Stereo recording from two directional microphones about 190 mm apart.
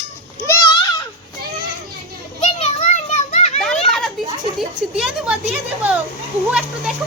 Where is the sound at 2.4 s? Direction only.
35° left (ahead or behind).